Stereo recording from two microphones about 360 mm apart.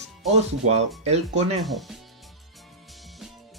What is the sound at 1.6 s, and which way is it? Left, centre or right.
Speech, centre.